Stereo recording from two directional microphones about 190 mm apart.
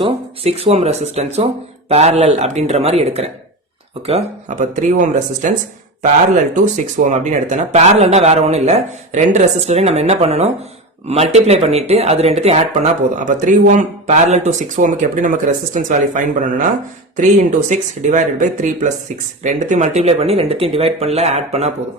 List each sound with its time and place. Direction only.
0.0 s speech: 30° right (ahead or behind)
6.6 s speech: 40° right (ahead or behind)
17.7 s speech: 40° right (ahead or behind)